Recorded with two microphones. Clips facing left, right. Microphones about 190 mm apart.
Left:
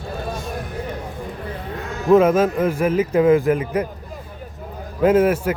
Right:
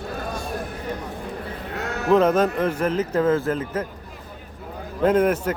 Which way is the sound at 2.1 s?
5° left (ahead or behind).